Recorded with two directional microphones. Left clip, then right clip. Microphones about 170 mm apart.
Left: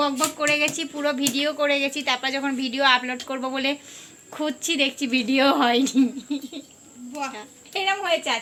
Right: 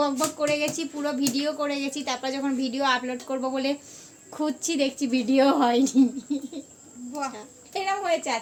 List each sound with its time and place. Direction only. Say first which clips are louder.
0.3 s a woman's voice: left 3 dB; 5° right (ahead or behind)
7.1 s speech: left 1 dB; 55° right (ahead or behind)
7.3 s speech: left 3 dB; 15° right (ahead or behind)